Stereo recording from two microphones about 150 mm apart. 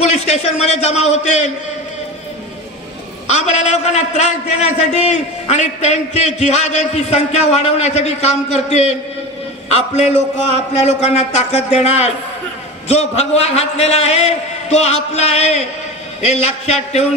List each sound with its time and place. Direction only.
0.0 s a man's voice: 45° left (ahead or behind)
3.3 s a man's voice: 50° left (ahead or behind)